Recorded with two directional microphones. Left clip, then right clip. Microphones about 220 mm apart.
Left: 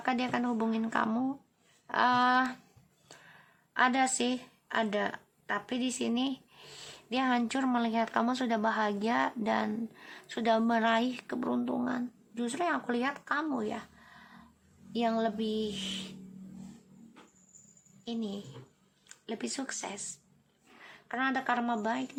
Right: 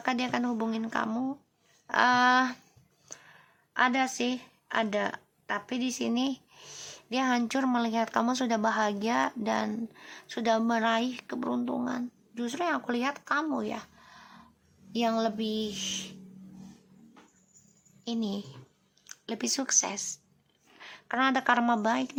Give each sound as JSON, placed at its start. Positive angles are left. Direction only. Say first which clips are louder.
{"t": 0.0, "sound": "a woman's voice", "louder": "right 2 dB", "side_deg": -5}
{"t": 1.9, "sound": "a woman's voice", "louder": "right 3 dB", "side_deg": -10}
{"t": 6.0, "sound": "speech", "louder": "right 2 dB", "side_deg": -10}
{"t": 18.0, "sound": "a woman's voice", "louder": "right 4 dB", "side_deg": -20}
{"t": 18.3, "sound": "a woman's voice", "louder": "right 4 dB", "side_deg": 0}
{"t": 19.0, "sound": "a sound", "louder": "right 3 dB", "side_deg": -20}
{"t": 19.5, "sound": "speech", "louder": "right 9 dB", "side_deg": -15}
{"t": 21.1, "sound": "a woman's voice", "louder": "right 5 dB", "side_deg": -25}